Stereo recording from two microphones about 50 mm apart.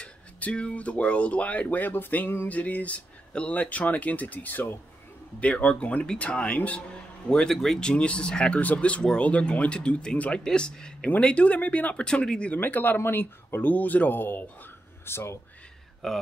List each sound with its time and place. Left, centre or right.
0.0 s speech: left
5.4 s speech: left
7.2 s speech: centre
7.8 s speech: left
8.5 s speech: left
12.0 s speech: centre
12.5 s speech: left
15.0 s speech: left
16.0 s speech: centre